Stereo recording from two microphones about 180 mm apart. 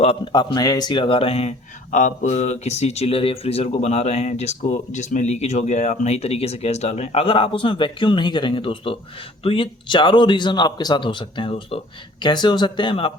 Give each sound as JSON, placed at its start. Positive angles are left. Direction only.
{"t": 0.0, "sound": "a man's voice", "side_deg": 25}